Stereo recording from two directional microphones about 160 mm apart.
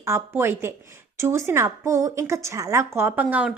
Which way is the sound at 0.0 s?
15° right (ahead or behind).